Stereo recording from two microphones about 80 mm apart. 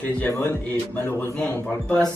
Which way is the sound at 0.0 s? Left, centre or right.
Left.